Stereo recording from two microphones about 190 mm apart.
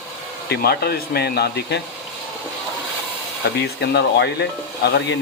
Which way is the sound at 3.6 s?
60° left (ahead or behind).